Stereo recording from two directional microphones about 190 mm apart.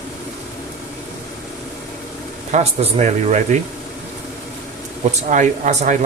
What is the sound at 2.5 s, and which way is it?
Speech, 40° right (ahead or behind).